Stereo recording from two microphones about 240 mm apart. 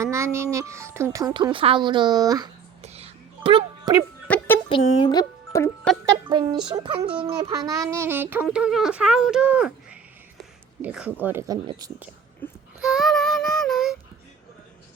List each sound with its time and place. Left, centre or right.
0.0 s speech: centre
2.8 s music: right
4.3 s chicken: centre
4.7 s speech: centre
6.2 s speech: centre
7.4 s a sound: centre
10.8 s speech: centre
12.4 s a sound: centre
12.8 s child singing: centre